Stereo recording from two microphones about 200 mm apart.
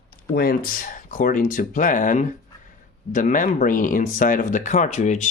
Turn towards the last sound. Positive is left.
turn(degrees=35)  # may be behind; listen again after turning